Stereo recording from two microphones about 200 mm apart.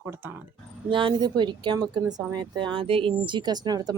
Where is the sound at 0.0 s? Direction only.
10° right (ahead or behind).